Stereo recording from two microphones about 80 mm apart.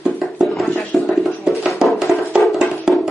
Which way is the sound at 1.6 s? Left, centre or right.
Centre.